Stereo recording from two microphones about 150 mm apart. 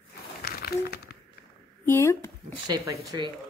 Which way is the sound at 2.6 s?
25° right (ahead or behind).